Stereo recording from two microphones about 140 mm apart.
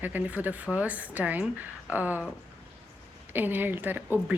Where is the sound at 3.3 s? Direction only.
15° right (ahead or behind).